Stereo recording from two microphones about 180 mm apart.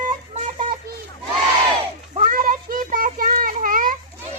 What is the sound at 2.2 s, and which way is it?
Child singing, 50° right (ahead or behind).